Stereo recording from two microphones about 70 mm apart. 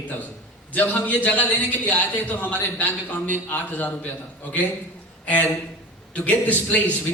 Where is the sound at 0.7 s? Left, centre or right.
Left.